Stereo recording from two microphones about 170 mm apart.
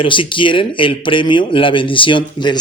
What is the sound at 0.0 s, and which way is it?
Speech, 30° left (ahead or behind).